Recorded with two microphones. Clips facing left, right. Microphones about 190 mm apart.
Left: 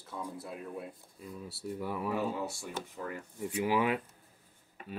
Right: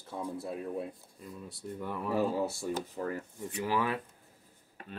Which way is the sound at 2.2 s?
35° right (ahead or behind).